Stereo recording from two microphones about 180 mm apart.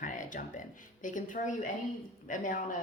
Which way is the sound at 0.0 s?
45° left (ahead or behind).